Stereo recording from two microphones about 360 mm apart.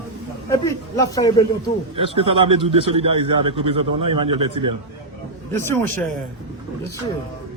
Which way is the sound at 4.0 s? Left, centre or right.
Right.